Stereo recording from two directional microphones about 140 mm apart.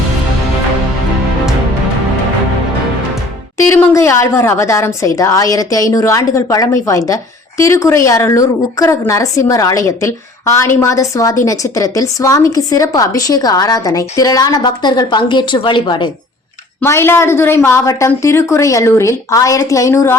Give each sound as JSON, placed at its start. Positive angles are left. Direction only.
{"t": 3.7, "sound": "a woman's voice", "side_deg": 20}
{"t": 16.8, "sound": "a woman's voice", "side_deg": 15}